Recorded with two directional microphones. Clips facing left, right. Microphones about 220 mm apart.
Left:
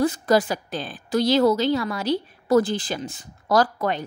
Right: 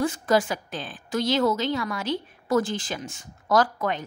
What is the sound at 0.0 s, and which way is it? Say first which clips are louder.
A woman's voice: left 3 dB; 40° left (ahead or behind).